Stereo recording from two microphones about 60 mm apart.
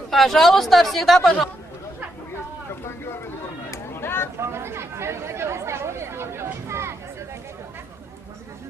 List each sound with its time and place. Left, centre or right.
0.1 s speech: centre
3.7 s a sound: left
4.4 s chatter: right